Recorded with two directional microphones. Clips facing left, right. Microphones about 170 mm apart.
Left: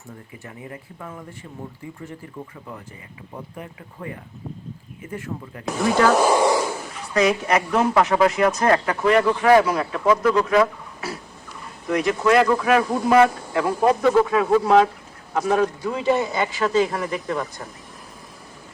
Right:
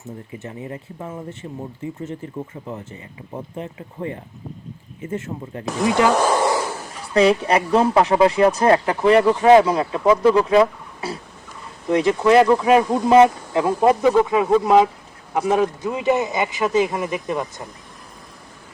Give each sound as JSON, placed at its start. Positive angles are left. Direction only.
{"t": 0.3, "sound": "speech", "side_deg": -25}
{"t": 6.1, "sound": "a sound", "side_deg": 10}
{"t": 6.9, "sound": "speech", "side_deg": -30}